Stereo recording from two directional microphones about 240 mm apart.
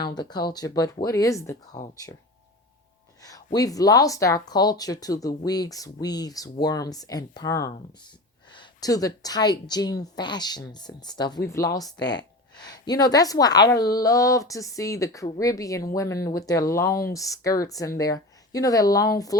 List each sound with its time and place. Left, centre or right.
0.0 s speech: centre
3.2 s speech: centre